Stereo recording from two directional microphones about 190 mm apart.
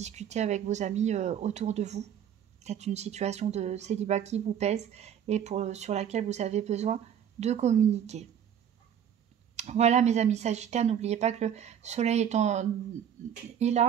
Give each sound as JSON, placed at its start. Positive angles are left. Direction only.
{"t": 0.0, "sound": "a woman's voice", "side_deg": -35}
{"t": 9.6, "sound": "a woman's voice", "side_deg": -35}